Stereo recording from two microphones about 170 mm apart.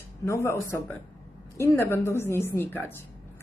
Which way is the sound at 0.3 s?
15° left (ahead or behind).